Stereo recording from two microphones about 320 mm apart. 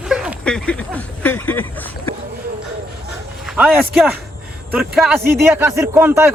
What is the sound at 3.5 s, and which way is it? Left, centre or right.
A man's voice, centre.